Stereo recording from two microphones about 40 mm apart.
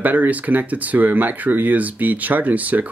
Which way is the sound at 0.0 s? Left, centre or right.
Right.